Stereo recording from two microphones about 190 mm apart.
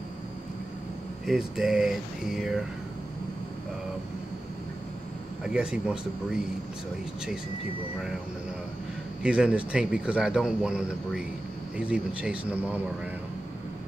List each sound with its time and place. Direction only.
1.2 s speech: centre (ahead or behind)
5.4 s speech: 5° right (ahead or behind)
9.2 s speech: 5° right (ahead or behind)